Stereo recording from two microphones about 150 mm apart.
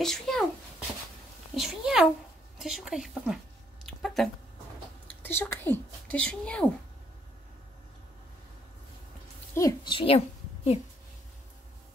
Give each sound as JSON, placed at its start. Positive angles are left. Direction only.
{"t": 0.0, "sound": "a child's voice", "side_deg": 5}
{"t": 1.5, "sound": "a sound", "side_deg": 0}
{"t": 2.6, "sound": "a woman's voice", "side_deg": -5}
{"t": 3.8, "sound": "a sound", "side_deg": 0}
{"t": 5.0, "sound": "speech", "side_deg": 10}
{"t": 9.5, "sound": "a woman's voice", "side_deg": 20}